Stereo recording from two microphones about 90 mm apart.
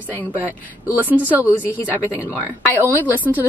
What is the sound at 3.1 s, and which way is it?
Speech, 20° right (ahead or behind).